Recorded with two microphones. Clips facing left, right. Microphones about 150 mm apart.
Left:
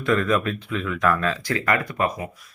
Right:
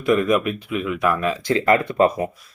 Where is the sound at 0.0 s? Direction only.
15° right (ahead or behind).